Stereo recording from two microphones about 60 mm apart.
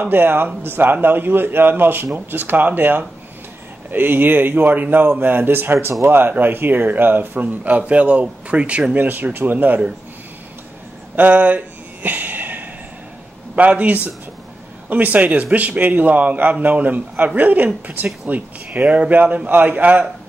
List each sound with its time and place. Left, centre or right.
0.0 s a man's voice: right; by 9.0 s centre
9.0 s a man's voice: right
11.1 s a sound: right
13.6 s speech: right